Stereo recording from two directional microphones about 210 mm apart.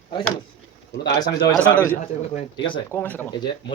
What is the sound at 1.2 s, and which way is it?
Speech, 20° left (ahead or behind).